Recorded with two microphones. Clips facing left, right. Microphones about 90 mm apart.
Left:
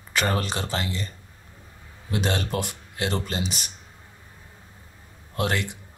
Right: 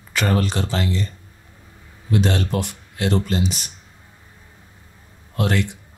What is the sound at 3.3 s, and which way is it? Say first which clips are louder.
Speech: right 7 dB; 5° left (ahead or behind).